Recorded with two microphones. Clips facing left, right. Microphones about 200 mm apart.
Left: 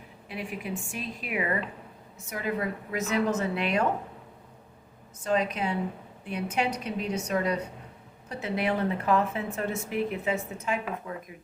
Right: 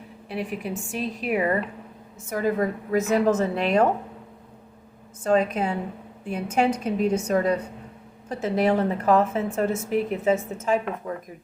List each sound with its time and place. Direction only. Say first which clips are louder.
0.3 s a woman's voice: right 5 dB; 40° right (ahead or behind)
5.2 s a woman's voice: right 6 dB; 45° right (ahead or behind)